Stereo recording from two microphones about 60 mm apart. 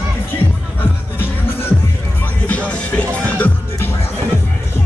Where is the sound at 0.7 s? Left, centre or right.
Left.